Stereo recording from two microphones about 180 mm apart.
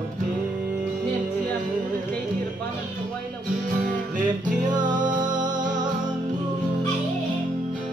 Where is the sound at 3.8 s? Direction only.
45° right (ahead or behind).